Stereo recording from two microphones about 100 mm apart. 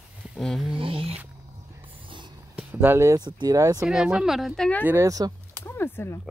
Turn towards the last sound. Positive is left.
turn(degrees=20)  # may be behind; listen again after turning